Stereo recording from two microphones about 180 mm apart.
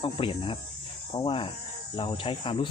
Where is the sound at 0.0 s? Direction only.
30° left (ahead or behind).